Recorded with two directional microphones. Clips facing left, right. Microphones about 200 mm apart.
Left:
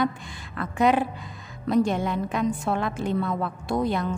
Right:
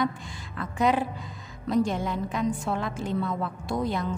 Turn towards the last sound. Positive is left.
turn(degrees=65)  # may be behind; listen again after turning